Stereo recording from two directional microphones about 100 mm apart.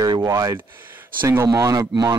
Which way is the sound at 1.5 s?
35° right (ahead or behind).